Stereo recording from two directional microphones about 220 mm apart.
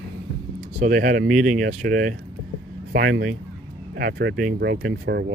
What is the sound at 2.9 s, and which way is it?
Speech, 50° right (ahead or behind).